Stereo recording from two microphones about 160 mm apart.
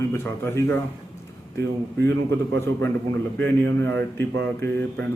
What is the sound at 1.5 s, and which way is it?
Speech, 90° right.